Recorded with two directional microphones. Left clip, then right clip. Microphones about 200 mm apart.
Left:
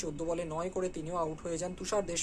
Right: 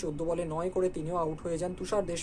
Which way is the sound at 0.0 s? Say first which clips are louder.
Right 3 dB; centre (ahead or behind).